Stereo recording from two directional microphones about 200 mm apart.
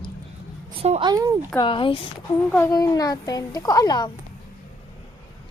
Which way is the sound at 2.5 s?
15° left (ahead or behind).